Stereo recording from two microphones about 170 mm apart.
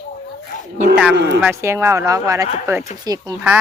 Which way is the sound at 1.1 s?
80° right.